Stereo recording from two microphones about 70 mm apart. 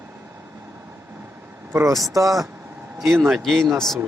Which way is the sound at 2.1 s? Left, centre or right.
Right.